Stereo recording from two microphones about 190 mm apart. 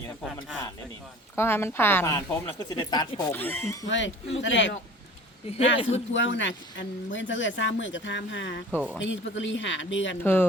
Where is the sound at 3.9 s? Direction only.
75° left (ahead or behind).